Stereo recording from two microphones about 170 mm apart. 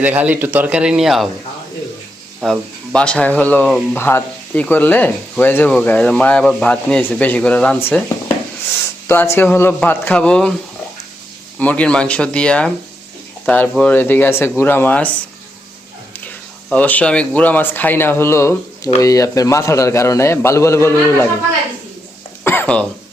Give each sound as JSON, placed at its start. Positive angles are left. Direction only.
{"t": 0.0, "sound": "a man's voice", "side_deg": -10}
{"t": 2.4, "sound": "speech", "side_deg": 5}
{"t": 9.0, "sound": "speech", "side_deg": 15}
{"t": 11.6, "sound": "speech", "side_deg": 5}
{"t": 16.2, "sound": "speech", "side_deg": 10}
{"t": 22.4, "sound": "a sound", "side_deg": 10}